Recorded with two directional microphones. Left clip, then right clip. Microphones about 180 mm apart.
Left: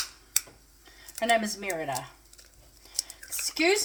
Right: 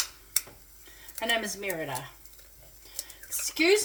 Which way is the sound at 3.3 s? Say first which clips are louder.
Right 1 dB; 30° left (ahead or behind).